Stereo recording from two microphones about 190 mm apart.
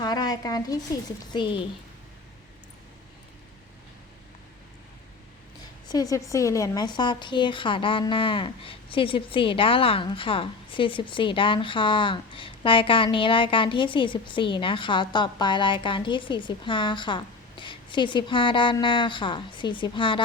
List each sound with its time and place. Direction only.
0.0 s a sound: 20° left (ahead or behind)
1.3 s a woman's voice: 25° left (ahead or behind)
5.9 s a woman's voice: 20° left (ahead or behind)